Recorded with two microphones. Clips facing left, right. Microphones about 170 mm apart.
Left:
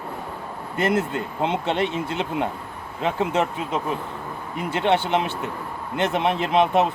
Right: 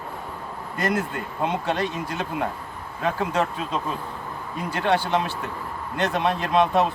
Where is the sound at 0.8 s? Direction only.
25° left (ahead or behind).